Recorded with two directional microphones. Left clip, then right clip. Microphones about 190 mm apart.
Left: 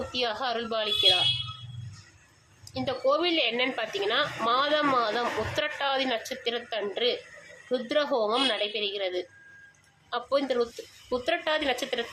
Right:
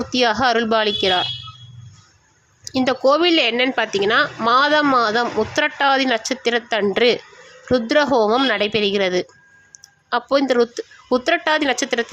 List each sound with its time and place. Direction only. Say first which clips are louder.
0.1 s speech: right 14 dB; 35° right (ahead or behind)
2.6 s speech: right 10 dB; 40° right (ahead or behind)